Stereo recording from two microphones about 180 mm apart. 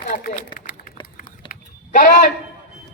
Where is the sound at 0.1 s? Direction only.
45° left (ahead or behind).